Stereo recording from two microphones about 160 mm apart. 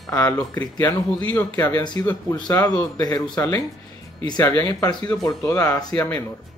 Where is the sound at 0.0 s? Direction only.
20° left (ahead or behind).